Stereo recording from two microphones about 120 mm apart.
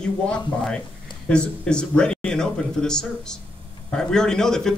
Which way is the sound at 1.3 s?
10° left (ahead or behind).